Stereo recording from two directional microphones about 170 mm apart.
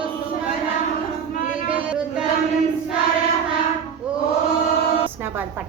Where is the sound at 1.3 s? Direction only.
50° left (ahead or behind).